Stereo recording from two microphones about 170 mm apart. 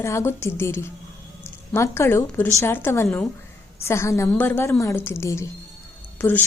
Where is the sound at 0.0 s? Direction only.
15° left (ahead or behind).